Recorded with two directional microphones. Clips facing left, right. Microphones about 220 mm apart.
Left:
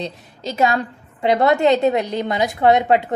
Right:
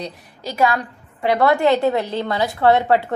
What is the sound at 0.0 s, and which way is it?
A woman's voice, 25° left (ahead or behind).